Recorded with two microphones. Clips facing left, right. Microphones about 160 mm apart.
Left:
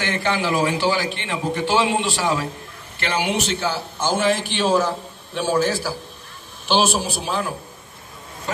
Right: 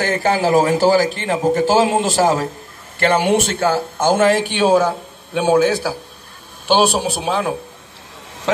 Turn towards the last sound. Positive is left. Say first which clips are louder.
# right 5 dB
turn(degrees=-70)  # may be behind; listen again after turning